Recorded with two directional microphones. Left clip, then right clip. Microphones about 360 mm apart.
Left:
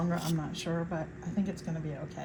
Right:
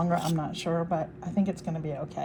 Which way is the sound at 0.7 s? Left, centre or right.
Right.